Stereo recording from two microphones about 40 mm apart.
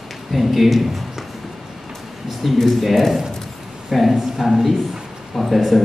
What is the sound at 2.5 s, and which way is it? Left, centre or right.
A man's voice, centre.